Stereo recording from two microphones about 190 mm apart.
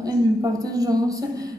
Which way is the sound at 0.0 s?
20° right (ahead or behind).